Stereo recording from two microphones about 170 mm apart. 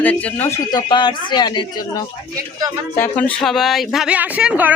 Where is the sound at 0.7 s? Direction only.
25° left (ahead or behind).